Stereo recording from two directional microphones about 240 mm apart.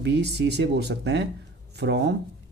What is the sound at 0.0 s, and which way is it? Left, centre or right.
Speech, right.